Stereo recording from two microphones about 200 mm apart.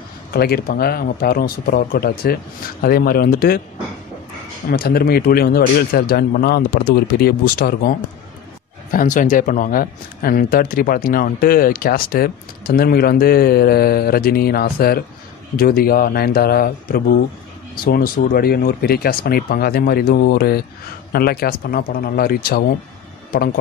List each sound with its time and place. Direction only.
0.3 s speech: 50° left (ahead or behind)
4.6 s speech: 50° left (ahead or behind)
8.9 s speech: 40° left (ahead or behind)